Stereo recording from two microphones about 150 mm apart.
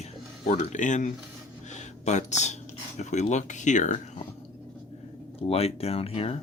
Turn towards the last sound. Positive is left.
turn(degrees=40)  # may be behind; listen again after turning